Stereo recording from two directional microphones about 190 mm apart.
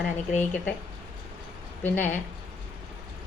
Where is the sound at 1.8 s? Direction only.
10° left (ahead or behind).